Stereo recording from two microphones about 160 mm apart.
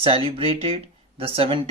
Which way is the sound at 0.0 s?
35° right (ahead or behind).